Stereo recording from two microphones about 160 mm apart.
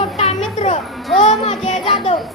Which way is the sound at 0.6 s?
45° left (ahead or behind).